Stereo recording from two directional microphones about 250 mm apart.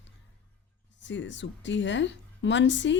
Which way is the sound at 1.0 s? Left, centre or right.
Left.